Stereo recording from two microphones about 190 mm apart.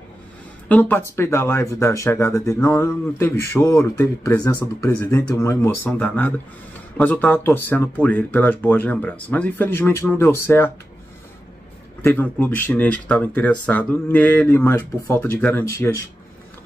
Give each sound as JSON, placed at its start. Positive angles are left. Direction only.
{"t": 0.7, "sound": "speech", "side_deg": 10}
{"t": 12.0, "sound": "speech", "side_deg": 10}